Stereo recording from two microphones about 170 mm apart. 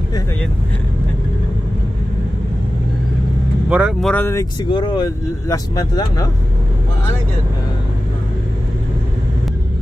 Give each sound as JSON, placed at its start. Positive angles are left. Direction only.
{"t": 3.6, "sound": "speech", "side_deg": -5}
{"t": 4.1, "sound": "speech", "side_deg": 15}
{"t": 4.6, "sound": "speech", "side_deg": 30}